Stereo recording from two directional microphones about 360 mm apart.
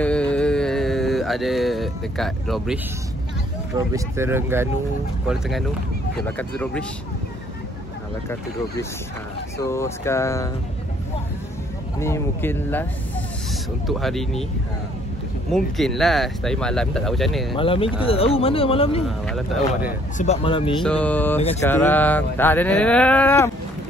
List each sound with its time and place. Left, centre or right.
0.0 s mantra: centre
3.7 s speech: centre
9.6 s speech: centre
12.0 s speech: centre
15.5 s speech: centre
17.6 s speech: centre
19.0 s speech: centre
19.9 s speech: centre
20.8 s speech: centre
21.4 s speech: centre
21.6 s speech: centre